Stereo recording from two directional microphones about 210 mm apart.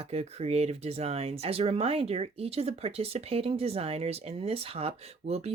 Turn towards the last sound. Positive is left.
turn(degrees=-30)  # may be behind; listen again after turning